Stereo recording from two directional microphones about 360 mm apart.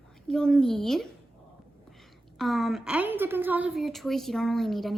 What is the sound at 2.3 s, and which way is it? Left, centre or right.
A woman's voice, centre.